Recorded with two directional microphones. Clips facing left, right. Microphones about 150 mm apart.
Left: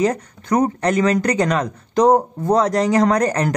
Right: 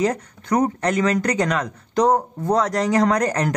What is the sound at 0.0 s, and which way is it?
Speech, 30° left (ahead or behind).